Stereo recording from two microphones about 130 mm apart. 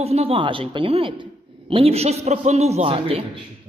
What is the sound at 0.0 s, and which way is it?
A man's voice, 50° right (ahead or behind).